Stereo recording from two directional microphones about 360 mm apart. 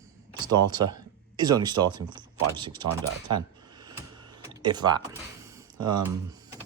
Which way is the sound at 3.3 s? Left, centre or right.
Centre.